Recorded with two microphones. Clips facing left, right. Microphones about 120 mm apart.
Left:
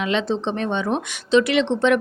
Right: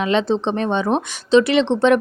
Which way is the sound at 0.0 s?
35° right (ahead or behind).